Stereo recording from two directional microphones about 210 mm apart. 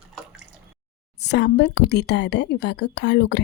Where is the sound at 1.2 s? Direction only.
55° left (ahead or behind).